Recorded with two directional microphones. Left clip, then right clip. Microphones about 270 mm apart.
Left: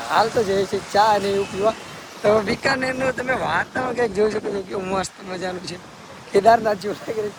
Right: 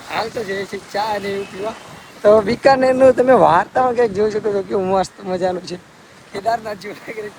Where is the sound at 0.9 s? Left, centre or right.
Centre.